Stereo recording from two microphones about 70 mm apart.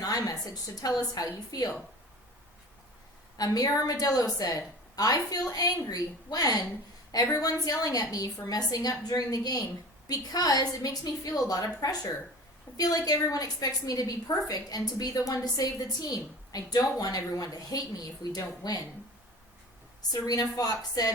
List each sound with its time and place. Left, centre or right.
0.0 s a woman's voice: left
3.3 s a woman's voice: left
12.7 s a woman's voice: left
20.0 s a woman's voice: left